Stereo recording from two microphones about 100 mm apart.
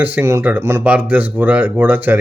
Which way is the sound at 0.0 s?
20° right (ahead or behind).